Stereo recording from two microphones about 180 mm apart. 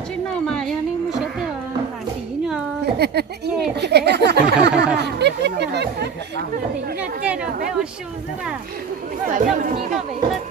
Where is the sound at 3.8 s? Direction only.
70° right (ahead or behind).